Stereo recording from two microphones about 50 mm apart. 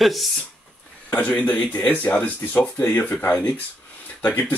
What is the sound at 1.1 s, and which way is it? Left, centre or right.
Speech, left.